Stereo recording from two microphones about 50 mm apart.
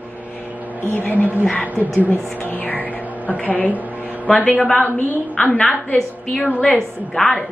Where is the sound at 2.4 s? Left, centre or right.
Left.